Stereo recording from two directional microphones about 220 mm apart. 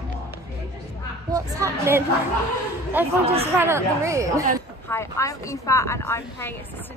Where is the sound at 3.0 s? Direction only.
10° right (ahead or behind).